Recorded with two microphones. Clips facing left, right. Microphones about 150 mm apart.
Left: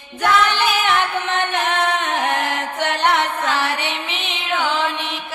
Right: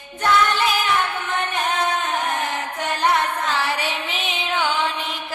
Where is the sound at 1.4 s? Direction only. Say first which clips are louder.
Left 1 dB; 75° left (ahead or behind).